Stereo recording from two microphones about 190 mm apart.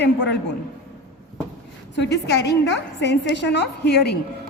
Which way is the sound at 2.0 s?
60° left (ahead or behind).